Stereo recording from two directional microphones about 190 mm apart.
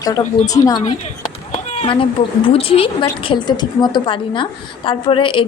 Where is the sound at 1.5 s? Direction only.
35° left (ahead or behind).